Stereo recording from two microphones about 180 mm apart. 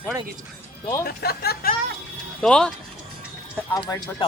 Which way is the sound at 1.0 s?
60° left (ahead or behind).